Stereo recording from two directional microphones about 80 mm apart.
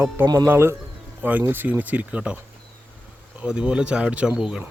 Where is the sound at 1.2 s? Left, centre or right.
Right.